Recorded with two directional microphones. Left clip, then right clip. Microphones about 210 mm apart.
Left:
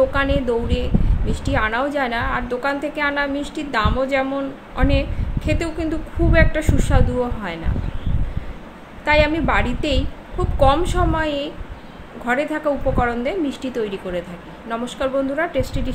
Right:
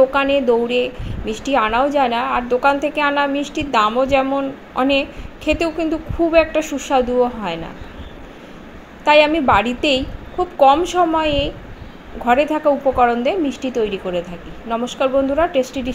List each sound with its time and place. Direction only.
0.1 s a woman's voice: 15° right (ahead or behind)
9.0 s a woman's voice: 15° right (ahead or behind)